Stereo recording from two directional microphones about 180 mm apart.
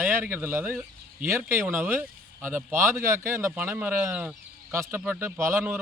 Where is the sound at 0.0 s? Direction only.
10° right (ahead or behind).